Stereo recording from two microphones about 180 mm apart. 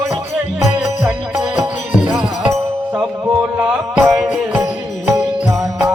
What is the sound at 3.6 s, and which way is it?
Music, 15° right (ahead or behind).